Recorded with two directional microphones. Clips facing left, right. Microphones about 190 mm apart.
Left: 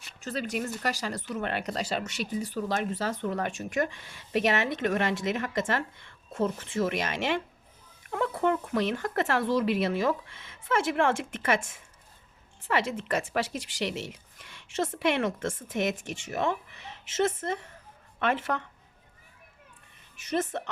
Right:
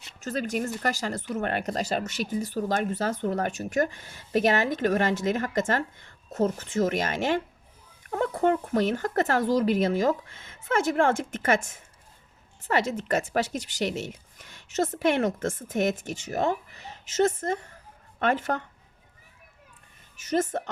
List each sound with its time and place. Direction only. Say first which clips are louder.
0.2 s speech: right 3 dB; 45° right (ahead or behind)
20.1 s a woman's voice: right 3 dB; 40° right (ahead or behind)